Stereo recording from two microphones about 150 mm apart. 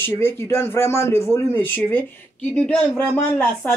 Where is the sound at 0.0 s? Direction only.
15° left (ahead or behind).